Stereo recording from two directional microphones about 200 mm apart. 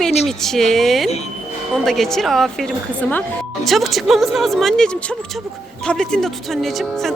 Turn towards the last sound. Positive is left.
turn(degrees=0)  # may be behind; listen again after turning